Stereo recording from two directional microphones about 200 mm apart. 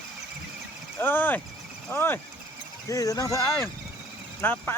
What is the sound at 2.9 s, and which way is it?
Speech, 15° left (ahead or behind).